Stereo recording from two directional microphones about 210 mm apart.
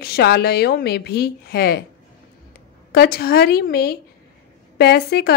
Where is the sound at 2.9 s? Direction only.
50° left (ahead or behind).